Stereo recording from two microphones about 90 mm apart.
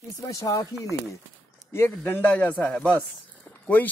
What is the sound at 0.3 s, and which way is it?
Speech, 40° left (ahead or behind).